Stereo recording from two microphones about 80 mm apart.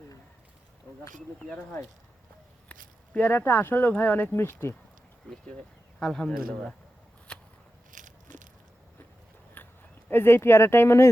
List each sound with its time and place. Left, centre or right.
2.6 s speech: centre
6.0 s speech: centre
9.6 s a sound: left
10.1 s speech: left